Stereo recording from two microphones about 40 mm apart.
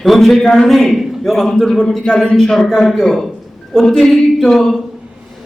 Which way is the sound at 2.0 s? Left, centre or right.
Left.